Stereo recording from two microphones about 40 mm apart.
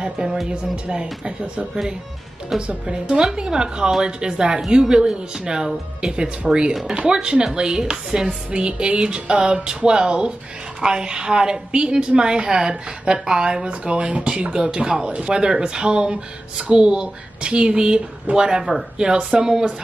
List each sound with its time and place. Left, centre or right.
0.0 s speech: centre
2.6 s speech: right